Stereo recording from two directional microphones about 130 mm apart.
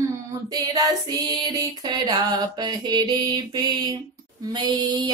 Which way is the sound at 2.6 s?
35° right (ahead or behind).